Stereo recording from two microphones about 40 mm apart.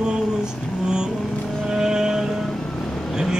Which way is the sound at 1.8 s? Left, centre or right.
Centre.